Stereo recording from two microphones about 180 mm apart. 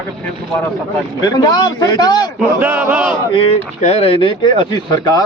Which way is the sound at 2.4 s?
10° right (ahead or behind).